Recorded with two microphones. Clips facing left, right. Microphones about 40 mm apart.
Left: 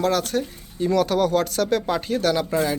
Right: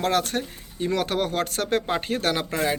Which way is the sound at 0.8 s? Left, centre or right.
Right.